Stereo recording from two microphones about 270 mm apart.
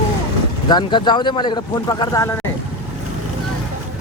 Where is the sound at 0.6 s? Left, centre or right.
Centre.